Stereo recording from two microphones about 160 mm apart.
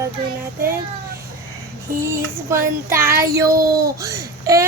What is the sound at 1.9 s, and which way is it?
A child's voice, 15° right (ahead or behind).